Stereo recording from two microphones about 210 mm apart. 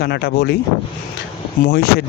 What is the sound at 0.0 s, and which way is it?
Speech, 50° left (ahead or behind).